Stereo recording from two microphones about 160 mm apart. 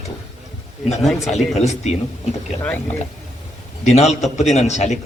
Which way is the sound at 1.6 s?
45° left (ahead or behind).